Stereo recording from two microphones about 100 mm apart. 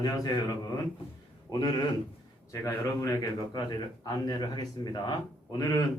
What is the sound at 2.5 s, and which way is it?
A man's voice, 35° left (ahead or behind).